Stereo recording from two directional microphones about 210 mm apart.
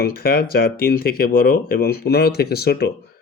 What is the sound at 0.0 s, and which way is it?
Speech, 45° left (ahead or behind).